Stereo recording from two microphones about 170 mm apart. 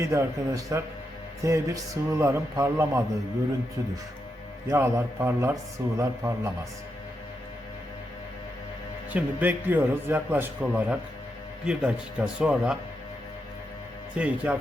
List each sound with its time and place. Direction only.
0.0 s a man's voice: 20° right (ahead or behind)
4.7 s a man's voice: 15° right (ahead or behind)
9.1 s a man's voice: 10° right (ahead or behind)
14.2 s a man's voice: 10° right (ahead or behind)